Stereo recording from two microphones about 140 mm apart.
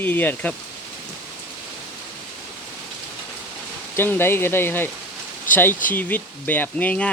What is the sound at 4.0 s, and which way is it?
Speech, 15° left (ahead or behind).